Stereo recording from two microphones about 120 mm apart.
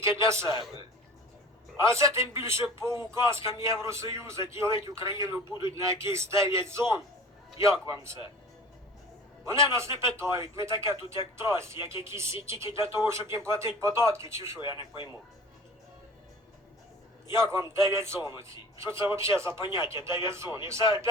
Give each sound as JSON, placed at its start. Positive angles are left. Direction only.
{"t": 0.0, "sound": "a man's voice", "side_deg": -25}
{"t": 1.8, "sound": "a man's voice", "side_deg": -25}
{"t": 5.5, "sound": "speech", "side_deg": 40}
{"t": 5.7, "sound": "a man's voice", "side_deg": -25}
{"t": 9.7, "sound": "a man's voice", "side_deg": -25}
{"t": 14.6, "sound": "speech", "side_deg": 40}
{"t": 17.3, "sound": "a man's voice", "side_deg": -25}